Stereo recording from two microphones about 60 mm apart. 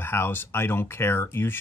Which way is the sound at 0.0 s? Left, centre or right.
Left.